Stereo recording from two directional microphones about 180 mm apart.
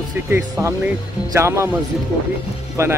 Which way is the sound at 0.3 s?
15° right (ahead or behind).